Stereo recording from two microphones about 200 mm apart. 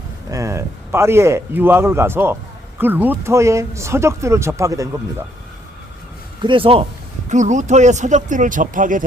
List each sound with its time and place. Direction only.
0.3 s speech: 15° right (ahead or behind)
6.4 s speech: 25° right (ahead or behind); by 9.0 s 40° right (ahead or behind)